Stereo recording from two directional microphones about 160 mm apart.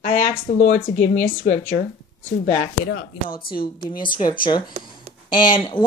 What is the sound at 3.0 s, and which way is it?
Speech, 65° left (ahead or behind).